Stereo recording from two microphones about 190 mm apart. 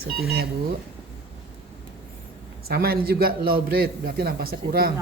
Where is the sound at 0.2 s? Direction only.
55° right (ahead or behind).